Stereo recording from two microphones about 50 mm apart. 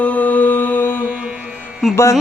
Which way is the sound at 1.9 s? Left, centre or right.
Left.